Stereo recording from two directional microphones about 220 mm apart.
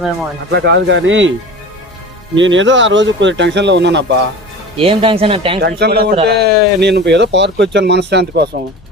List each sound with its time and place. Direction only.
0.5 s speech: 50° right (ahead or behind)
2.3 s speech: 55° right (ahead or behind)
4.8 s speech: 25° right (ahead or behind)
5.5 s speech: 50° right (ahead or behind)